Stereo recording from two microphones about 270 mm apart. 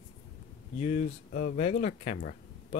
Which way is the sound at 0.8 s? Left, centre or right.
Left.